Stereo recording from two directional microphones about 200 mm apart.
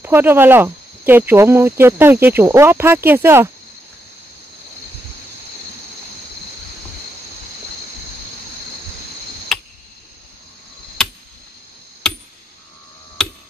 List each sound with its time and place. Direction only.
0.0 s speech: 10° right (ahead or behind)
9.5 s tick: centre (ahead or behind)
13.2 s a sound: 5° left (ahead or behind)